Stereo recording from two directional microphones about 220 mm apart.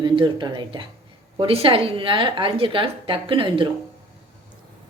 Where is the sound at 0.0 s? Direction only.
20° right (ahead or behind).